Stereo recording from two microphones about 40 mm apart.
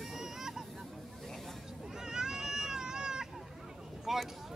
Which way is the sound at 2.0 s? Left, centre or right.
Centre.